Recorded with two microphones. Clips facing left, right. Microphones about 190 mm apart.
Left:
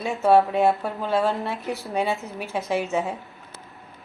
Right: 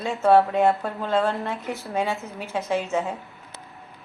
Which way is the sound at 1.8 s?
15° left (ahead or behind).